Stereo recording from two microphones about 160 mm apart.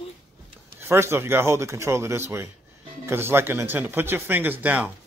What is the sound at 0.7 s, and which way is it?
Speech, 15° right (ahead or behind).